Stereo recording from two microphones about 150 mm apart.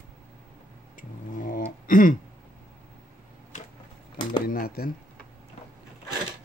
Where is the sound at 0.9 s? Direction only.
65° left (ahead or behind).